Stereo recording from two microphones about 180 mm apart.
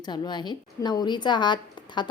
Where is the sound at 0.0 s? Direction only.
25° left (ahead or behind).